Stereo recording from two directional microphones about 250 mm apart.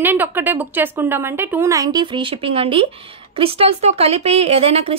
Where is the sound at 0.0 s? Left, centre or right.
Centre.